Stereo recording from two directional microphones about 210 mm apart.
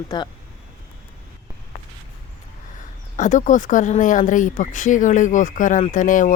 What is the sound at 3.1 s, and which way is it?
Speech, 35° left (ahead or behind).